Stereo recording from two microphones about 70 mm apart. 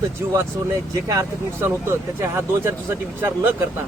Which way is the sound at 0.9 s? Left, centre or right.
Right.